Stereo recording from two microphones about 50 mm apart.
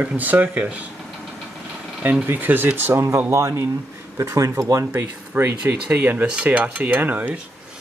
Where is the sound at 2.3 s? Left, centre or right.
Right.